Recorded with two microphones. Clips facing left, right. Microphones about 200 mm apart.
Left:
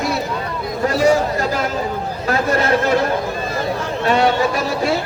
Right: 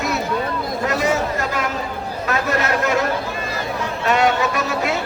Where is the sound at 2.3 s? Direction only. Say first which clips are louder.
Left 4 dB; 30° left (ahead or behind).